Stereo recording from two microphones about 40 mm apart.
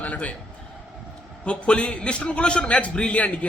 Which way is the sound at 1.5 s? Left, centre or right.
Left.